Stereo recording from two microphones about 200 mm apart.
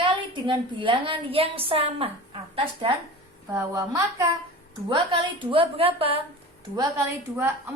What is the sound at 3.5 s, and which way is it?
Speech, 15° right (ahead or behind).